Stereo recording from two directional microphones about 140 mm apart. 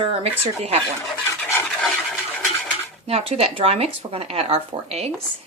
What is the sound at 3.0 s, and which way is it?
Speech, 45° right (ahead or behind).